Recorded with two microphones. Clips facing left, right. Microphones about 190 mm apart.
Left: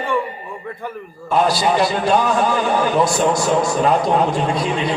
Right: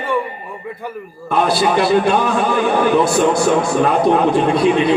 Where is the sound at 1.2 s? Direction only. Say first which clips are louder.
Right 1 dB; 60° right (ahead or behind).